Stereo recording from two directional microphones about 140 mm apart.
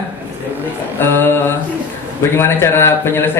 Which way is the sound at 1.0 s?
15° left (ahead or behind).